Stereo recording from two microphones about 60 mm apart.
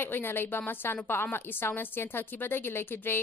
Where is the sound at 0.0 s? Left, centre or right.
Left.